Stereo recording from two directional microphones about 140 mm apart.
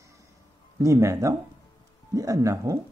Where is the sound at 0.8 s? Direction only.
20° right (ahead or behind).